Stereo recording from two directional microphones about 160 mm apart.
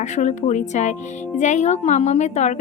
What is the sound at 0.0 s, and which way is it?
A woman's voice, 45° left (ahead or behind).